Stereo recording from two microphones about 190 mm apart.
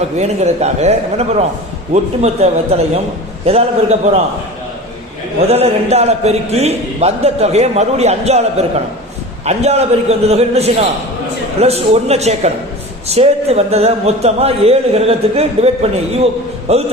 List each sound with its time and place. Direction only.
0.2 s a man's voice: 35° right (ahead or behind)
5.5 s a man's voice: 35° right (ahead or behind)